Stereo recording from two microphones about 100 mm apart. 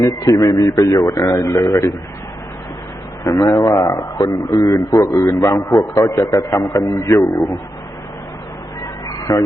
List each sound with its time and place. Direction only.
0.0 s speech: 35° left (ahead or behind)
3.2 s speech: 35° left (ahead or behind)
5.5 s a man's voice: 45° left (ahead or behind)
6.0 s speech: 35° left (ahead or behind)
6.9 s speech: 30° left (ahead or behind)
7.2 s a man's voice: 50° left (ahead or behind)
9.0 s a sound: 40° left (ahead or behind)